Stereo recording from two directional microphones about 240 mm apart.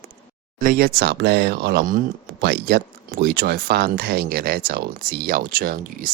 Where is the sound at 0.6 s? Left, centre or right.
Right.